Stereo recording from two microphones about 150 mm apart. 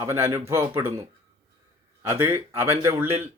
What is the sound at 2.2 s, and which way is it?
Speech, 15° right (ahead or behind).